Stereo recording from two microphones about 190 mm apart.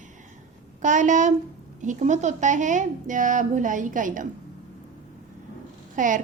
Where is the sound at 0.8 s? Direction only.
40° right (ahead or behind).